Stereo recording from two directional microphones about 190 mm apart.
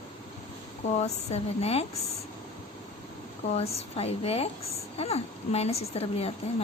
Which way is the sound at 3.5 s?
30° left (ahead or behind).